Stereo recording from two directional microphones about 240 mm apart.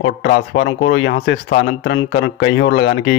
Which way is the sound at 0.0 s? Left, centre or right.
Left.